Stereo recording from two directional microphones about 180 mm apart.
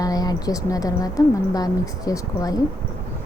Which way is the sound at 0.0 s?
20° left (ahead or behind).